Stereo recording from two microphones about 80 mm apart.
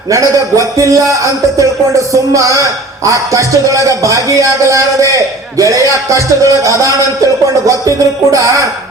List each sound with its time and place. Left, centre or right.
0.1 s speech: right
7.9 s music: right